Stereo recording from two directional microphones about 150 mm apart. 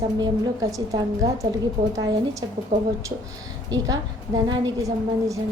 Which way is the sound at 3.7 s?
25° right (ahead or behind).